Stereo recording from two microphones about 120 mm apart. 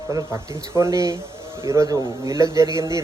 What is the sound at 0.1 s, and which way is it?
Speech, 25° right (ahead or behind).